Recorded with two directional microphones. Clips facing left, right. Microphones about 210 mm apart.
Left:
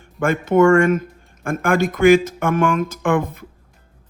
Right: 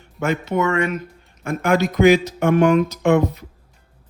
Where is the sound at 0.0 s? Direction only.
50° left (ahead or behind).